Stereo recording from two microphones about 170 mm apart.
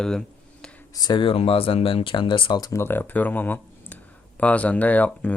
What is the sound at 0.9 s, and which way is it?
Speech, 25° left (ahead or behind).